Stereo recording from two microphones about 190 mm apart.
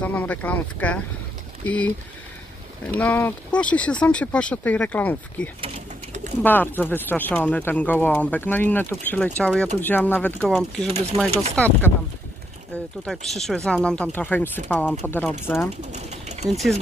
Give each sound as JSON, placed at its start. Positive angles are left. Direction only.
{"t": 0.0, "sound": "speech", "side_deg": 10}
{"t": 3.0, "sound": "speech", "side_deg": 10}
{"t": 10.9, "sound": "speech", "side_deg": -35}
{"t": 11.5, "sound": "speech", "side_deg": 5}
{"t": 13.0, "sound": "speech", "side_deg": 0}
{"t": 15.8, "sound": "ratchet", "side_deg": -35}